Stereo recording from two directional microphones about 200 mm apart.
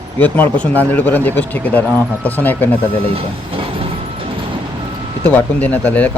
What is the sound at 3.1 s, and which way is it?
Speech, 25° right (ahead or behind).